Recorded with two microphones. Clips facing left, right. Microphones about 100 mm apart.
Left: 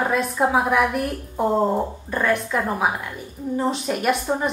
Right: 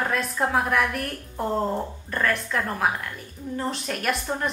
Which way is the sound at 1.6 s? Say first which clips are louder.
Left 6 dB; 30° left (ahead or behind).